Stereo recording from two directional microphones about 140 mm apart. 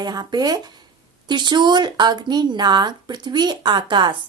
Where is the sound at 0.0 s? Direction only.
30° right (ahead or behind).